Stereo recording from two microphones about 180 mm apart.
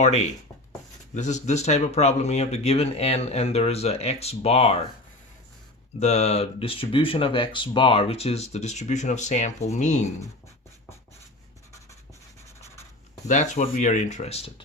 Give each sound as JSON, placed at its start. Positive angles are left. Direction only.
{"t": 0.0, "sound": "speech", "side_deg": 40}
{"t": 6.0, "sound": "speech", "side_deg": 35}
{"t": 13.2, "sound": "speech", "side_deg": 40}